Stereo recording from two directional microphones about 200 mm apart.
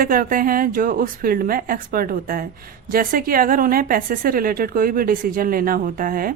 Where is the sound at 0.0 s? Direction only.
45° right (ahead or behind).